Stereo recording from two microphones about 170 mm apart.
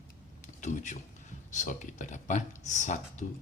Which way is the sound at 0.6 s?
45° left (ahead or behind).